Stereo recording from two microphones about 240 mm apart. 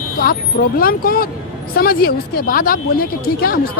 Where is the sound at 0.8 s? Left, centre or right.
Left.